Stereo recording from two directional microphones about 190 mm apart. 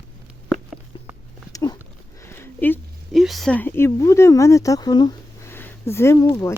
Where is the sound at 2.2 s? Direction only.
10° left (ahead or behind).